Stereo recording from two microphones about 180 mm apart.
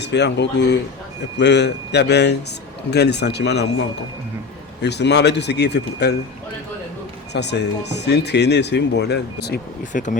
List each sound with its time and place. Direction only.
0.0 s speech: 75° left (ahead or behind)
7.3 s speech: 70° left (ahead or behind)
9.9 s speech: 50° left (ahead or behind)